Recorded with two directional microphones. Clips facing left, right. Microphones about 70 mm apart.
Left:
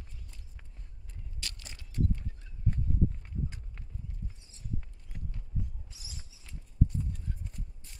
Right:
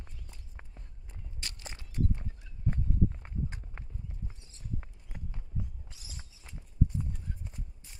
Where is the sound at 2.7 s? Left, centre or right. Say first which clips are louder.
Right 1 dB; right.